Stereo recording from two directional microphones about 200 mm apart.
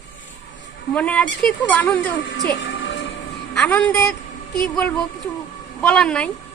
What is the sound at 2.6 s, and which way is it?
Music, 70° left (ahead or behind).